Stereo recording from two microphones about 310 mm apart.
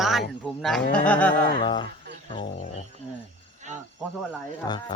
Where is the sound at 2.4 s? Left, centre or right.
Left.